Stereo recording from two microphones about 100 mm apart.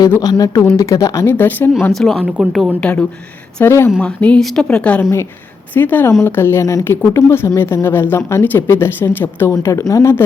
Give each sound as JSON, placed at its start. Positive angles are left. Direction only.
{"t": 0.2, "sound": "speech", "side_deg": 40}
{"t": 1.9, "sound": "speech", "side_deg": 0}
{"t": 2.8, "sound": "speech", "side_deg": 10}
{"t": 3.6, "sound": "speech", "side_deg": 25}
{"t": 4.0, "sound": "speech", "side_deg": 10}